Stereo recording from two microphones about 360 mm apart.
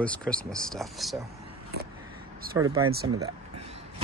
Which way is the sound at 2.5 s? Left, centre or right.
Centre.